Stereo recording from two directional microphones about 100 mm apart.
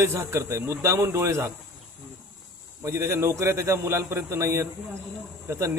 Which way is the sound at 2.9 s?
25° right (ahead or behind).